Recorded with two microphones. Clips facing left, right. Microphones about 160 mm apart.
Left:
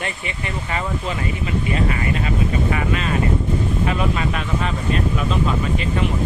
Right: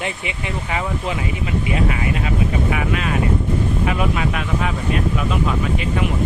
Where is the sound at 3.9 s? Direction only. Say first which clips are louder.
Right 1 dB; 10° right (ahead or behind).